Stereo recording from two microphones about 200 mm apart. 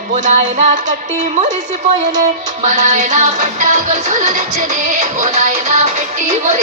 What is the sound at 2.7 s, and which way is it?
Music, 35° right (ahead or behind).